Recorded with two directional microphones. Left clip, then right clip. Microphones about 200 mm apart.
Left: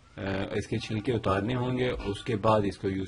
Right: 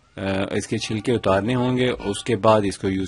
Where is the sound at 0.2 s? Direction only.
45° right (ahead or behind).